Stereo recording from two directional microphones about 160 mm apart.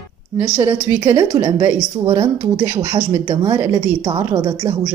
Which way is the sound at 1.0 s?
25° right (ahead or behind).